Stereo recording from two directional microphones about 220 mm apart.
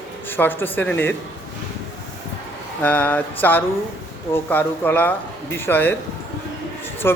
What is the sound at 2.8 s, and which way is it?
Speech, 5° left (ahead or behind).